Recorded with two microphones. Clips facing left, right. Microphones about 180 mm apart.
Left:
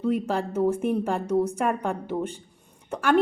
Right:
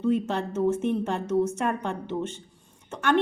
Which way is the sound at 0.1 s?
10° left (ahead or behind).